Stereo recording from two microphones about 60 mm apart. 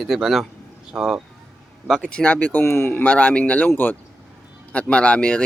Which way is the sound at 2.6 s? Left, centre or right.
Left.